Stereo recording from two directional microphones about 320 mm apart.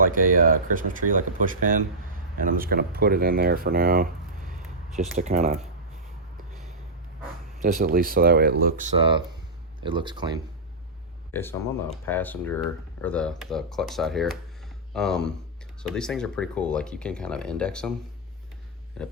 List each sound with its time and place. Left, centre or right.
0.0 s speech: right
2.4 s speech: right
7.6 s speech: right
11.3 s speech: centre
19.0 s speech: centre